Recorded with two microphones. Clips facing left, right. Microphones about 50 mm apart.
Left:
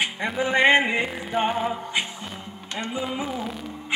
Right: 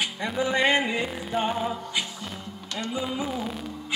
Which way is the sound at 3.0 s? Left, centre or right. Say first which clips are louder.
Left 1 dB; centre.